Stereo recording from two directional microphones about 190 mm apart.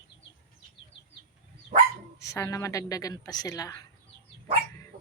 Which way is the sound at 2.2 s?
15° left (ahead or behind).